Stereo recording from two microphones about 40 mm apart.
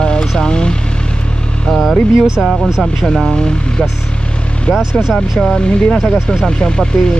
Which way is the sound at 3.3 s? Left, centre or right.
Centre.